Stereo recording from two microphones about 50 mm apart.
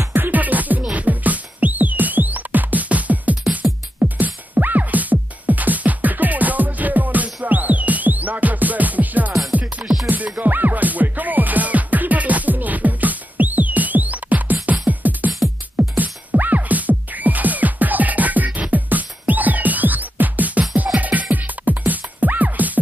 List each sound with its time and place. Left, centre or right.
0.1 s music: right
3.6 s music: centre
4.0 s music: right